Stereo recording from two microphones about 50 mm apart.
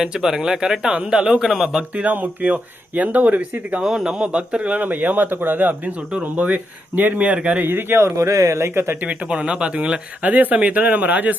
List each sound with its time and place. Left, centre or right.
0.0 s speech: centre
2.0 s speech: right
3.8 s speech: centre
4.8 s speech: right
7.6 s speech: right
8.1 s speech: right
9.0 s speech: right